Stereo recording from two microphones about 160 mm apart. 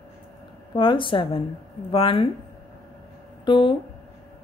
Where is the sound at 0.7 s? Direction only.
30° left (ahead or behind).